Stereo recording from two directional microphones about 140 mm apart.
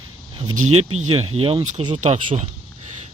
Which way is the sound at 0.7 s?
50° right (ahead or behind).